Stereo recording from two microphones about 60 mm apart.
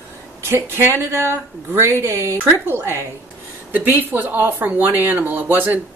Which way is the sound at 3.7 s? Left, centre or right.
Right.